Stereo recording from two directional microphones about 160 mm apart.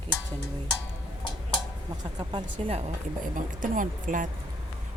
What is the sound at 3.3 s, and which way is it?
Speech, 55° right (ahead or behind).